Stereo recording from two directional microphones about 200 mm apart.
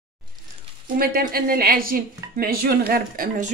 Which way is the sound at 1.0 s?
50° right (ahead or behind).